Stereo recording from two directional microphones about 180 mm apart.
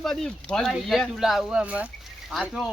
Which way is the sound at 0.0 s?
Centre (ahead or behind).